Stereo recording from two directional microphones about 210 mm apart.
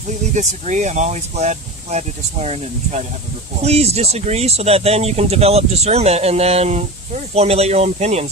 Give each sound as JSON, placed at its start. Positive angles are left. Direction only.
{"t": 0.3, "sound": "speech", "side_deg": -35}